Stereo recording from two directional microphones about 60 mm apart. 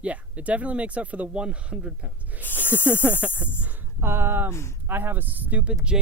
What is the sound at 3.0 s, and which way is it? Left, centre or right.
Speech, right.